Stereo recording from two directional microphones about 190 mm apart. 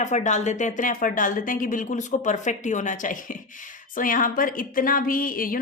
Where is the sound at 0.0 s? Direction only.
40° left (ahead or behind).